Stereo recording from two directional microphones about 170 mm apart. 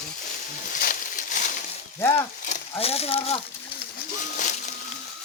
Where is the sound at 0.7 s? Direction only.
55° left (ahead or behind).